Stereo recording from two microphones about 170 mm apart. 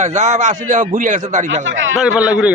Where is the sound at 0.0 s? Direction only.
45° right (ahead or behind).